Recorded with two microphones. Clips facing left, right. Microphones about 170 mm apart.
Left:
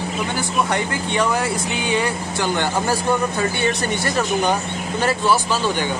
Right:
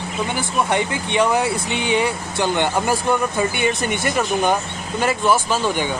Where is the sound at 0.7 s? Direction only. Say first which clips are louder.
Right 1 dB; 20° right (ahead or behind).